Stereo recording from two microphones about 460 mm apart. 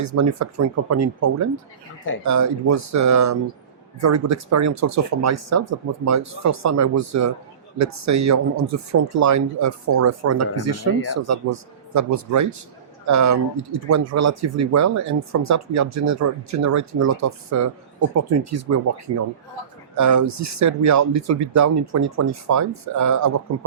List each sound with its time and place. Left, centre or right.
0.0 s speech: right